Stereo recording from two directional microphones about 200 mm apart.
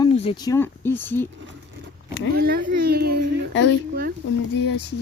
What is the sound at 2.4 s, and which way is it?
Speech, 50° right (ahead or behind).